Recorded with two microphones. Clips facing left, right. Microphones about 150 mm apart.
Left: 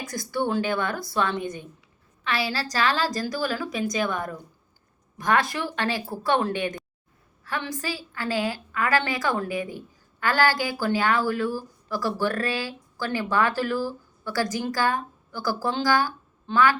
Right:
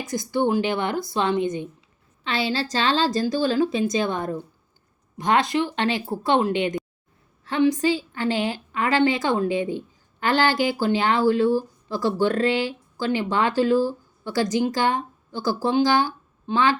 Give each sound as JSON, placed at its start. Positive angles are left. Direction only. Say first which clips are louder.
{"t": 0.0, "sound": "a woman's voice", "louder": "right 5 dB", "side_deg": -20}